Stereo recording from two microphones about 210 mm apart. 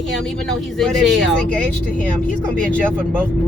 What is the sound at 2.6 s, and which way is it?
Speech, 5° left (ahead or behind).